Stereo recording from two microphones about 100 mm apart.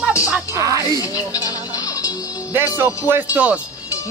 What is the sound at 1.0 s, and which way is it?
Speech, 35° left (ahead or behind).